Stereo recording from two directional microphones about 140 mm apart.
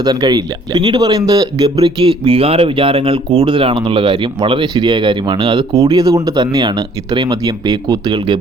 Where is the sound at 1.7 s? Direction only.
40° right (ahead or behind).